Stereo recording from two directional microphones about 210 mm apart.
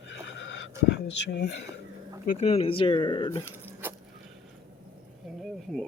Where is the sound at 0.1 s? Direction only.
60° left (ahead or behind).